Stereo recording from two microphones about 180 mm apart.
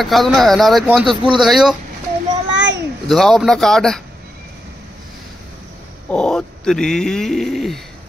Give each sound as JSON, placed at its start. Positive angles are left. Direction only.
{"t": 0.0, "sound": "speech", "side_deg": 0}
{"t": 2.5, "sound": "a sound", "side_deg": -90}
{"t": 3.1, "sound": "speech", "side_deg": 0}
{"t": 6.0, "sound": "speech", "side_deg": 5}